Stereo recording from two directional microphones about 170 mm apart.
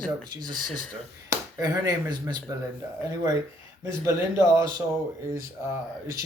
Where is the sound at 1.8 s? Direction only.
25° right (ahead or behind).